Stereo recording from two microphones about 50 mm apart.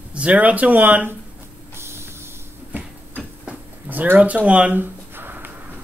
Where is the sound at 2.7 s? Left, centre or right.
Right.